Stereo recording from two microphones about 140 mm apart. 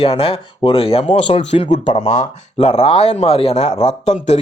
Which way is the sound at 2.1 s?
50° left (ahead or behind).